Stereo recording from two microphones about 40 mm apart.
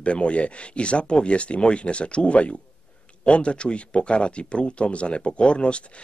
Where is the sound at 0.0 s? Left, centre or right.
Left.